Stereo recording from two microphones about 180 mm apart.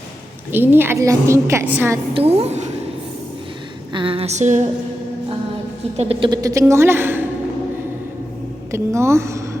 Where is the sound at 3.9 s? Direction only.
30° right (ahead or behind).